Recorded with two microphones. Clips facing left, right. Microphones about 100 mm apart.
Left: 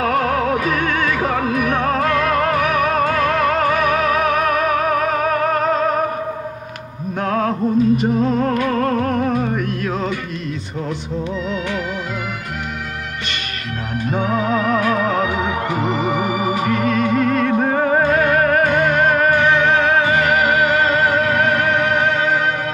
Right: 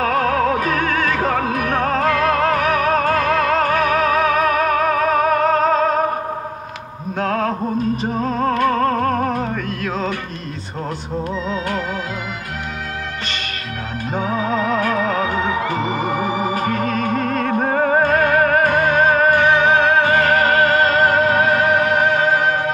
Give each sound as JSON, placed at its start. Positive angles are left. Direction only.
{"t": 0.0, "sound": "music", "side_deg": -45}
{"t": 7.2, "sound": "music", "side_deg": -45}
{"t": 14.3, "sound": "music", "side_deg": 55}
{"t": 14.8, "sound": "music", "side_deg": -45}
{"t": 15.8, "sound": "organ", "side_deg": 60}
{"t": 16.5, "sound": "music", "side_deg": -45}